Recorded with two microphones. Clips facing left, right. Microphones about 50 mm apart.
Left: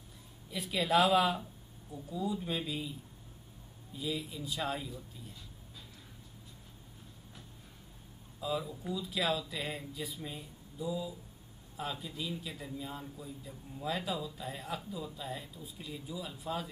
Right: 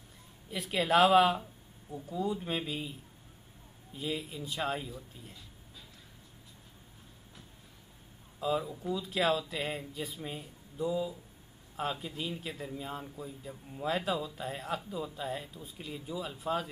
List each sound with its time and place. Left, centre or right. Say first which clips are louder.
0.5 s a man's voice: right 2 dB; right
3.9 s a man's voice: right 1 dB; right
8.4 s a man's voice: right 4 dB; right